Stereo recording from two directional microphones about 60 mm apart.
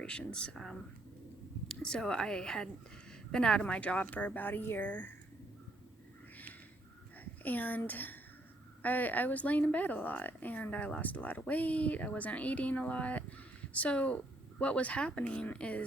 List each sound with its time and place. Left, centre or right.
0.0 s a woman's voice: centre
7.4 s speech: left